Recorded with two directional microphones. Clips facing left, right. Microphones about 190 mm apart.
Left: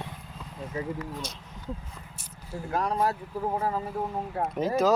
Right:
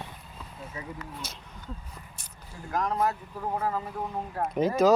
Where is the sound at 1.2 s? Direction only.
5° right (ahead or behind).